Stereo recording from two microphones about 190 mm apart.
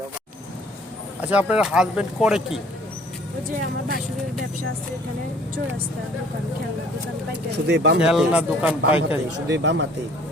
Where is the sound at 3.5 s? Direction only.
50° right (ahead or behind).